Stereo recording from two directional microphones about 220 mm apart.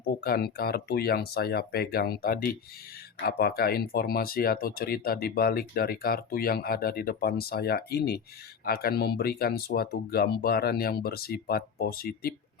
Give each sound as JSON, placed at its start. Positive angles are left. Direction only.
{"t": 0.0, "sound": "speech", "side_deg": 45}